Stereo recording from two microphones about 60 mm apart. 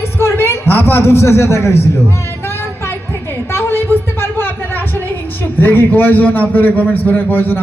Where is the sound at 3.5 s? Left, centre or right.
Left.